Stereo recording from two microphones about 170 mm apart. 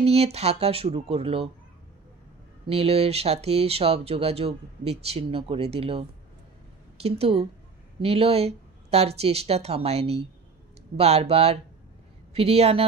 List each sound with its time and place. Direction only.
0.0 s speech: 35° right (ahead or behind)
2.7 s speech: 35° right (ahead or behind)